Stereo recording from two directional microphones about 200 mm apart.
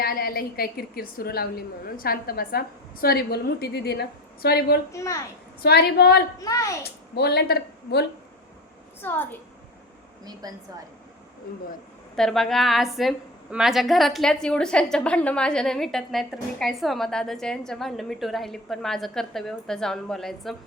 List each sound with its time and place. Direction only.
0.0 s a woman's voice: 50° left (ahead or behind)
4.9 s a child's voice: 15° left (ahead or behind)
5.6 s a woman's voice: 50° left (ahead or behind)
6.4 s a child's voice: 15° left (ahead or behind)
7.2 s a woman's voice: 55° left (ahead or behind)
9.0 s a woman's voice: 10° left (ahead or behind)
10.4 s a woman's voice: 20° right (ahead or behind)
12.1 s a woman's voice: centre (ahead or behind)